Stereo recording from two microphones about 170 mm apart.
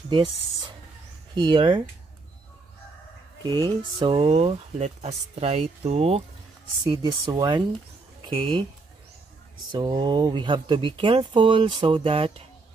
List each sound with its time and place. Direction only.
0.1 s speech: 30° right (ahead or behind)
3.4 s speech: 25° right (ahead or behind)
6.8 s speech: 25° right (ahead or behind)
9.7 s speech: 25° right (ahead or behind)